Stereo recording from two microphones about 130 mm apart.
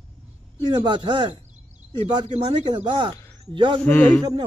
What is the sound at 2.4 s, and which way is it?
Speech, 40° right (ahead or behind).